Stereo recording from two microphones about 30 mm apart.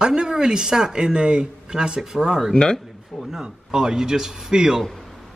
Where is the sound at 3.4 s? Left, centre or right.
Right.